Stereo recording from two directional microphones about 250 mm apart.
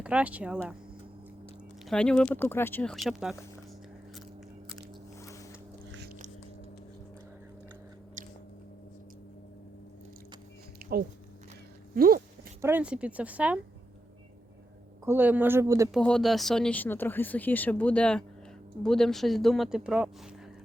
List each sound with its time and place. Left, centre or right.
0.0 s speech: centre
1.8 s speech: centre
5.2 s biting: centre
8.2 s biting: right
11.9 s speech: right
12.6 s speech: centre
15.0 s speech: centre
15.9 s speech: centre